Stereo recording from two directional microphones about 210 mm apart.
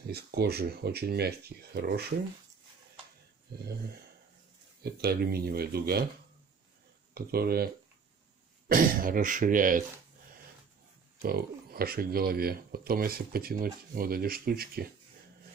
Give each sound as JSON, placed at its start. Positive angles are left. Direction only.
{"t": 0.1, "sound": "speech", "side_deg": -50}
{"t": 4.8, "sound": "speech", "side_deg": -50}
{"t": 7.2, "sound": "speech", "side_deg": -45}
{"t": 11.2, "sound": "speech", "side_deg": -45}